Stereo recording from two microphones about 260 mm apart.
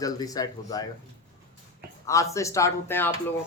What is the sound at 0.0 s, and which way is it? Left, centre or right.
Speech, centre.